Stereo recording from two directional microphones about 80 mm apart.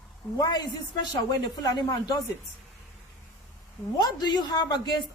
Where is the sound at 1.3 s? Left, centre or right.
Left.